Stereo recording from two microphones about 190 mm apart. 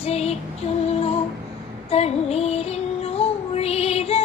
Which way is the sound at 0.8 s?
35° left (ahead or behind).